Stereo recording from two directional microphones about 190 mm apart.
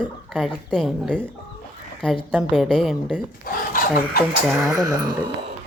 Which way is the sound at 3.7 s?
50° left (ahead or behind).